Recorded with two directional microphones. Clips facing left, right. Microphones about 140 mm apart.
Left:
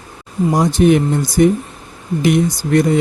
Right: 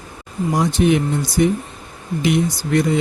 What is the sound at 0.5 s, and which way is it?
Speech, 45° left (ahead or behind).